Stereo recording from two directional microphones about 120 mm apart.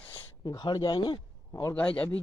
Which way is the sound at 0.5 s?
30° left (ahead or behind).